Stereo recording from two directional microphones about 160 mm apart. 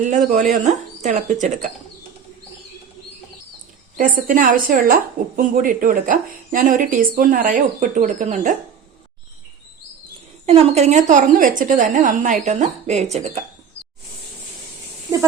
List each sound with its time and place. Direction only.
0.5 s a woman's voice: 50° right (ahead or behind)
3.9 s speech: 55° right (ahead or behind)
10.4 s a woman's voice: 45° right (ahead or behind)